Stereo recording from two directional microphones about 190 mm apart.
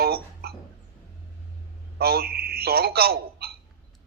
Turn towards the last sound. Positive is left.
turn(degrees=-55)  # may be behind; listen again after turning